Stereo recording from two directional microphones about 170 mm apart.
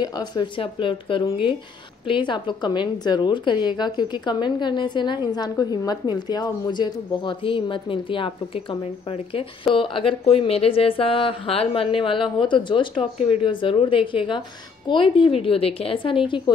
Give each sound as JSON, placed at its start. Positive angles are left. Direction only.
{"t": 0.0, "sound": "a woman's voice", "side_deg": 25}